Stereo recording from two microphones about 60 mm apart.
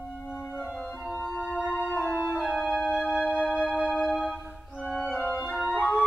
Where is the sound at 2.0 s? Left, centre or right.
Right.